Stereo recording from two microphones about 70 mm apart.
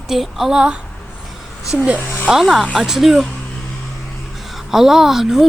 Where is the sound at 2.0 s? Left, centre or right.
Left.